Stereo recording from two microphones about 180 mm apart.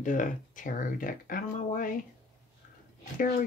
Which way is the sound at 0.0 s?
45° left (ahead or behind).